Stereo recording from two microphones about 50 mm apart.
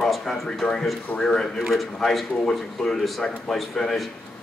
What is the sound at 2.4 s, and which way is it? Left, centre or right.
Speech, centre.